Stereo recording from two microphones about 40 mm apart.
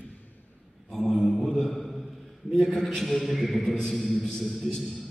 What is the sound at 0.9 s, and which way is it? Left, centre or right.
Mantra, centre.